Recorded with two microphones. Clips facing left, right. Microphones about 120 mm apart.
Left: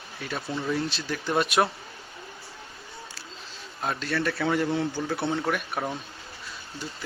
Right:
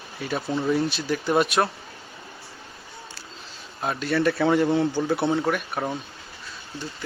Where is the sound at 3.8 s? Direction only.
5° right (ahead or behind).